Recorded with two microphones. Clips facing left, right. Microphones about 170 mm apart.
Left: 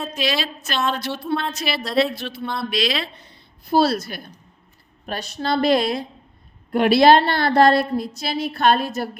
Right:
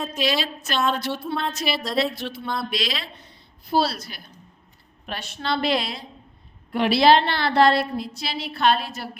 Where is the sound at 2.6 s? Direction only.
70° left (ahead or behind).